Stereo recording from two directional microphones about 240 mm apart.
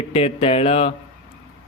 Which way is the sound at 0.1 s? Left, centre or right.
Left.